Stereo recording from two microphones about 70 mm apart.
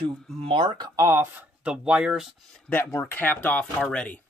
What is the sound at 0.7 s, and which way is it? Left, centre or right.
Speech, right.